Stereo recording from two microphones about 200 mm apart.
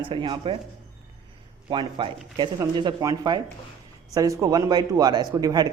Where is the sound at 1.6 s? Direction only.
25° right (ahead or behind).